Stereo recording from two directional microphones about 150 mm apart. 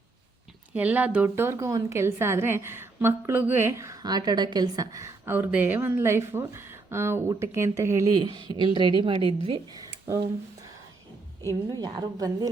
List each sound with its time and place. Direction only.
0.7 s a woman's voice: 10° right (ahead or behind); by 9.6 s 35° right (ahead or behind)
11.7 s a woman's voice: 25° right (ahead or behind)